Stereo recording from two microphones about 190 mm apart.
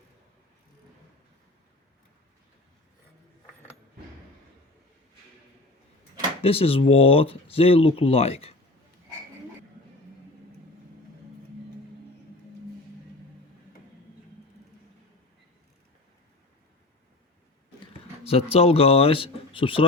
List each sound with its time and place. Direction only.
6.4 s speech: 30° left (ahead or behind)
18.2 s a sound: 30° left (ahead or behind)
18.5 s speech: 30° left (ahead or behind)